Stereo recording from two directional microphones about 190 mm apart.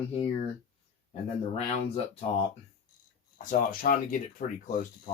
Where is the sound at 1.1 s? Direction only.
35° left (ahead or behind).